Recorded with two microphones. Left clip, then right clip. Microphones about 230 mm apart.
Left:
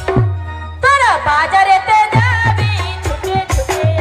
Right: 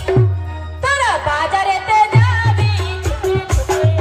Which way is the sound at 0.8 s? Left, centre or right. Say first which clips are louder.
Left 5 dB; centre.